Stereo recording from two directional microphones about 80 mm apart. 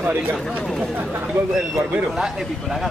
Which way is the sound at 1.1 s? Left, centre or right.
Right.